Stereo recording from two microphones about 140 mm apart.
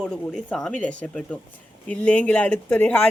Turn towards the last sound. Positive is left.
turn(degrees=10)  # may be behind; listen again after turning